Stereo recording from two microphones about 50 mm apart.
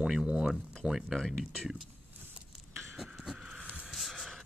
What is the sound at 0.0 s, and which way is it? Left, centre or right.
Speech, centre.